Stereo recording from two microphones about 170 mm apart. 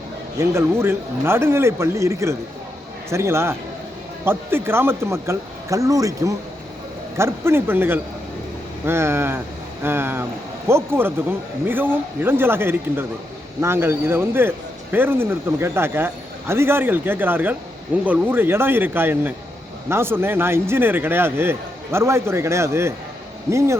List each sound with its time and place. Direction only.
0.3 s a man's voice: 15° right (ahead or behind)